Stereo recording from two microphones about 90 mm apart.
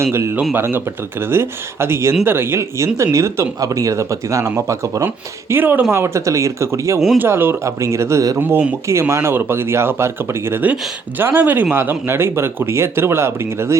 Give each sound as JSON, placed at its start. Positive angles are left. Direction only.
{"t": 0.0, "sound": "speech", "side_deg": -30}
{"t": 5.0, "sound": "speech", "side_deg": -25}
{"t": 8.4, "sound": "speech", "side_deg": -25}